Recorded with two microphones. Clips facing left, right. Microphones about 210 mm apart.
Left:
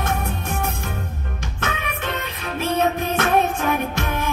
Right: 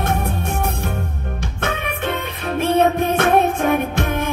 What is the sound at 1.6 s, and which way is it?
Music, 55° right (ahead or behind).